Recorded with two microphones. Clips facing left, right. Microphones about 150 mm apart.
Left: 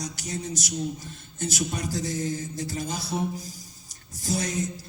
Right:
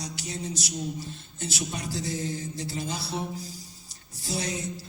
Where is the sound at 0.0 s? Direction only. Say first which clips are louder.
Left 2 dB; 45° left (ahead or behind).